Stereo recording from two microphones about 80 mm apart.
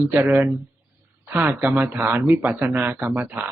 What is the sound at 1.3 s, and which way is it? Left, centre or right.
Speech, right.